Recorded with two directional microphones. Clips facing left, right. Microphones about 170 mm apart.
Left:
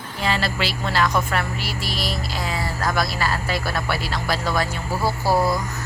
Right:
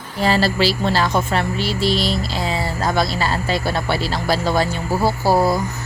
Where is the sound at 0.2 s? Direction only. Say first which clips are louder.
Right 7 dB; 35° right (ahead or behind).